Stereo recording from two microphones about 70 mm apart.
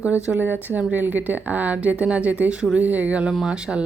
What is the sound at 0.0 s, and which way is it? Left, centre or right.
Speech, centre.